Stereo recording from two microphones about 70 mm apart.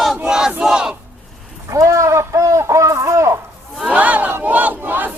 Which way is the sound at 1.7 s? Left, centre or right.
Right.